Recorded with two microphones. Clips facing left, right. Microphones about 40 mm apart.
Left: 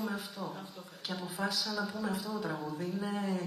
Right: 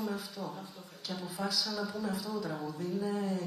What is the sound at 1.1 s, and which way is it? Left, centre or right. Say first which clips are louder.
A woman's voice: left 1 dB; left.